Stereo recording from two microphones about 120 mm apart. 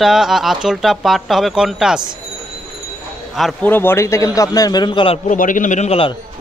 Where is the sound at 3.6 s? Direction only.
15° left (ahead or behind); by 5.2 s 45° left (ahead or behind).